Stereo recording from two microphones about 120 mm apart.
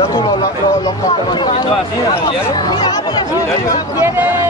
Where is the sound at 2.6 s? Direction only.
35° left (ahead or behind).